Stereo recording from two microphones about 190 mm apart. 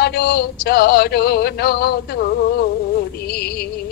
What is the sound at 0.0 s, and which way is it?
Music, 55° left (ahead or behind).